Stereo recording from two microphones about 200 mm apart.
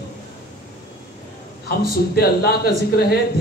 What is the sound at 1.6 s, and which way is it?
A man's voice, 50° left (ahead or behind).